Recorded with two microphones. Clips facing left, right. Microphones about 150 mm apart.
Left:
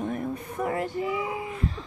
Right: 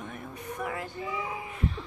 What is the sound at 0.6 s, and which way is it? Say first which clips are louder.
Female singing: left 7 dB; 30° left (ahead or behind).